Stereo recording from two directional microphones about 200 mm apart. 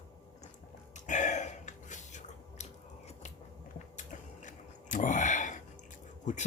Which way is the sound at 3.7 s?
40° left (ahead or behind).